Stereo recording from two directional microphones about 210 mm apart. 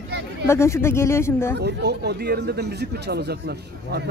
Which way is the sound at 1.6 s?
50° right (ahead or behind).